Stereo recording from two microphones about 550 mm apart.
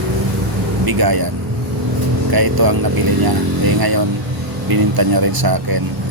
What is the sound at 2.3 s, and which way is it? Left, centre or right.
Speech, right.